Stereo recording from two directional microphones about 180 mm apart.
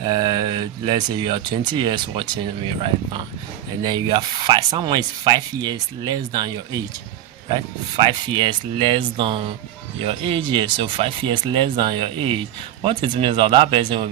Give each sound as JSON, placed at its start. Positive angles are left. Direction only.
{"t": 0.0, "sound": "speech", "side_deg": -20}